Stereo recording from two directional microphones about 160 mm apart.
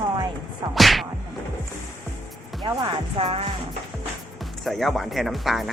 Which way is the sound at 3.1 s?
40° right (ahead or behind).